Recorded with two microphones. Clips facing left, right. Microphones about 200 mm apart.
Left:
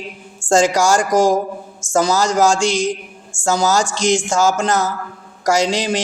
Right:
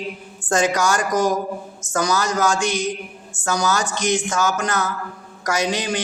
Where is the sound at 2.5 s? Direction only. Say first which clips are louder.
Left 4 dB; 90° left.